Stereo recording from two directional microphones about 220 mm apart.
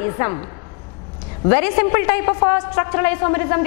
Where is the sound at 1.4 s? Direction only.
10° left (ahead or behind).